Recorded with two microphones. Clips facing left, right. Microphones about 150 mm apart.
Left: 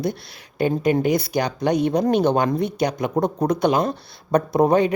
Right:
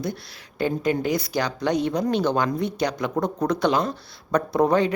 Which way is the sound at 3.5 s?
50° left (ahead or behind).